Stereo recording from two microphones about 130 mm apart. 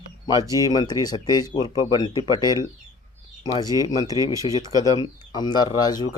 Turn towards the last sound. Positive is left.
turn(degrees=30)  # may be behind; listen again after turning